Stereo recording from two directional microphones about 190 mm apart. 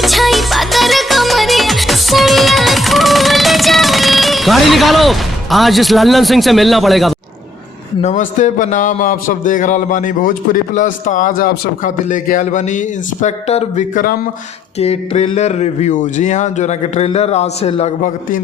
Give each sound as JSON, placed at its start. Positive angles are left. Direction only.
{"t": 0.0, "sound": "music", "side_deg": 0}
{"t": 8.0, "sound": "a man's voice", "side_deg": 40}
{"t": 14.8, "sound": "speech", "side_deg": 35}